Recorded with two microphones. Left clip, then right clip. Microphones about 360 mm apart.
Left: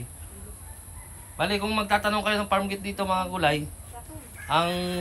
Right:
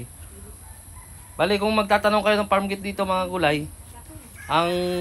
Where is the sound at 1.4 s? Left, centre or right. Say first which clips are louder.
Right 5 dB; centre.